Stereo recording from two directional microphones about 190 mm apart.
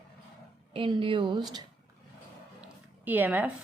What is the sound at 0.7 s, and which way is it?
Speech, 25° right (ahead or behind).